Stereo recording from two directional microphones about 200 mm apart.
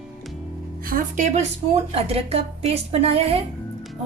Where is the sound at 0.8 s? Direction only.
40° right (ahead or behind).